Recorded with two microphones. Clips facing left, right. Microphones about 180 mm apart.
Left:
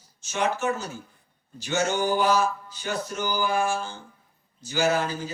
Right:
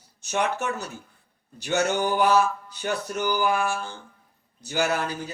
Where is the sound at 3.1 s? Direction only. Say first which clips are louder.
Right 2 dB; 60° right (ahead or behind).